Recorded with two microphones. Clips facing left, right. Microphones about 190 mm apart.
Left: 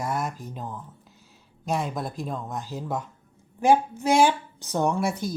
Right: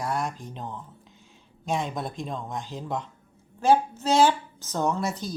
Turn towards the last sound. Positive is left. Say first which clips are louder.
# left 2 dB
turn(degrees=10)  # may be behind; listen again after turning